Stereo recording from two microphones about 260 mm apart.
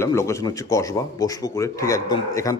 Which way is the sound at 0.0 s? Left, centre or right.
Centre.